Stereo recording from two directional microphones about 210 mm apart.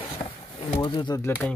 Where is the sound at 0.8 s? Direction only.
20° left (ahead or behind).